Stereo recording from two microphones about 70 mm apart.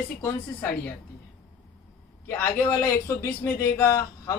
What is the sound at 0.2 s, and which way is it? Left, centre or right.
Speech, left.